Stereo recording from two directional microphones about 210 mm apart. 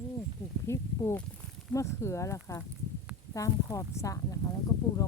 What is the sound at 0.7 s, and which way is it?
Speech, 10° left (ahead or behind).